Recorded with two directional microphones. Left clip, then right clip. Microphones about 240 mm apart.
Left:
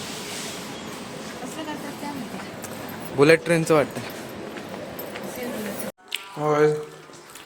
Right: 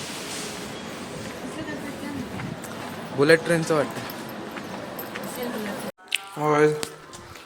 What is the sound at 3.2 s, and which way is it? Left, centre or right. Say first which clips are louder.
Speech: left 2 dB; left.